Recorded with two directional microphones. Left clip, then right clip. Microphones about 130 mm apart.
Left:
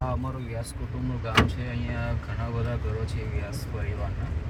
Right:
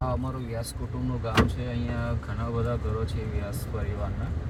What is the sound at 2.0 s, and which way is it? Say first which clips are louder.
Speech: even; 5° right (ahead or behind).